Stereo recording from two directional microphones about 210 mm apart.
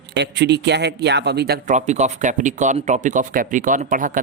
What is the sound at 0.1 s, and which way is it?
Speech, 55° right (ahead or behind).